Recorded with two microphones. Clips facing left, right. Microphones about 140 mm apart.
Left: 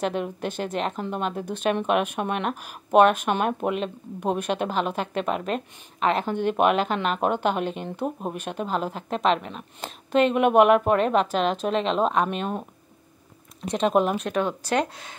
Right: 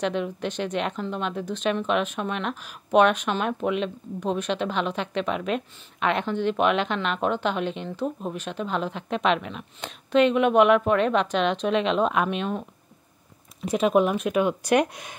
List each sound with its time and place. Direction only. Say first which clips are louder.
0.0 s speech: even; 45° left (ahead or behind)
13.7 s speech: right 1 dB; 5° right (ahead or behind)